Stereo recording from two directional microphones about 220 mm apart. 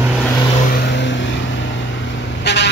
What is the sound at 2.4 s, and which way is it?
Vehicle, 50° left (ahead or behind).